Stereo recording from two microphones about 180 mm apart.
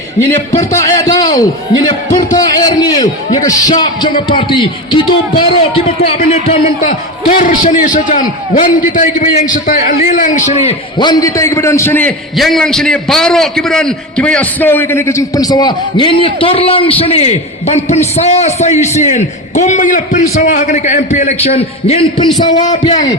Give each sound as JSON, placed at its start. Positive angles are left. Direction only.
{"t": 0.3, "sound": "a man's voice", "side_deg": 40}
{"t": 0.8, "sound": "a man's voice", "side_deg": 20}